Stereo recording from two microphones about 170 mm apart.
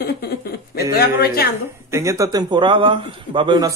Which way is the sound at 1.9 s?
15° right (ahead or behind).